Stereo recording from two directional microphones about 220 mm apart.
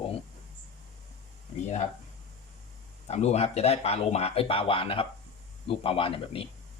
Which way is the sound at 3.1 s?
30° left (ahead or behind).